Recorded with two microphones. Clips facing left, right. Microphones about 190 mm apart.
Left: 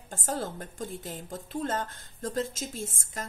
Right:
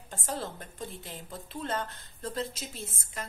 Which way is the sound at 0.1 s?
45° left (ahead or behind).